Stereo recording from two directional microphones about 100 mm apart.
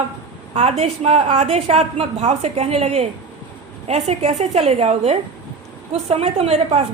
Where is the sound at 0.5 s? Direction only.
90° right.